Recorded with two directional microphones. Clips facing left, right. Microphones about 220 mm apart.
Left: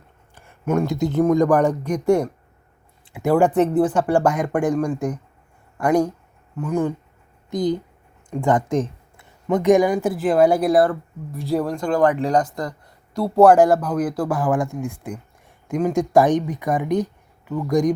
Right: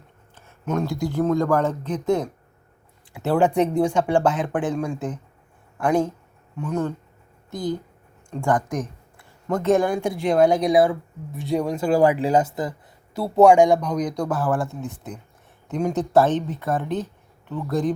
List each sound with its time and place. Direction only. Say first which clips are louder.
0.3 s a sound: left 4 dB; 10° left (ahead or behind)
0.9 s speech: left 4 dB; 20° left (ahead or behind)
5.8 s speech: left 2 dB; 10° left (ahead or behind)
7.5 s speech: left 5 dB; 20° left (ahead or behind)